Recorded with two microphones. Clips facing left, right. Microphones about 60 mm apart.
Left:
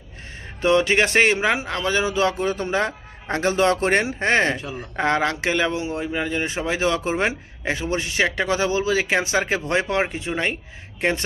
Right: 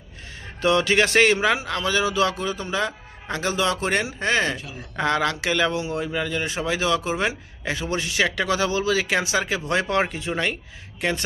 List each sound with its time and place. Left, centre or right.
0.6 s speech: left
2.5 s a man's voice: left
4.9 s speech: left
9.8 s speech: centre
10.1 s a man's voice: left